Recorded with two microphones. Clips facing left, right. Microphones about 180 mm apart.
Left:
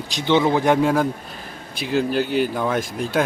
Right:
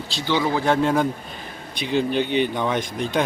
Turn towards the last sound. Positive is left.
turn(degrees=5)  # may be behind; listen again after turning